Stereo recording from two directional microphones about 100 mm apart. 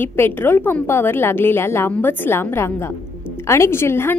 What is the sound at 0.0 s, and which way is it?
A woman's voice, 20° left (ahead or behind).